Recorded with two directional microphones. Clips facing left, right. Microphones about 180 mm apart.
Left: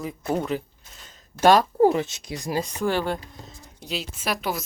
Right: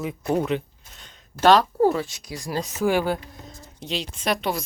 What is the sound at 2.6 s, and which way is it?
Speech, 5° right (ahead or behind).